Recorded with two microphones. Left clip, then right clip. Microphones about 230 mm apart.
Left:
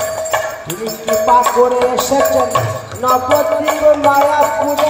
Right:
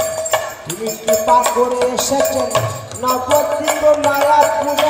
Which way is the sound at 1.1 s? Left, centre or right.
Right.